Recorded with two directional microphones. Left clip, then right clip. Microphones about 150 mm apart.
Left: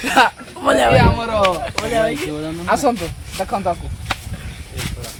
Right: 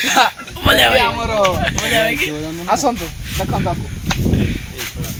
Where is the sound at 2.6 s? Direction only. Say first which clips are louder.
Even; 15° left (ahead or behind).